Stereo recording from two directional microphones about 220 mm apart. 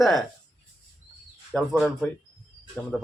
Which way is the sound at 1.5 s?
Centre (ahead or behind).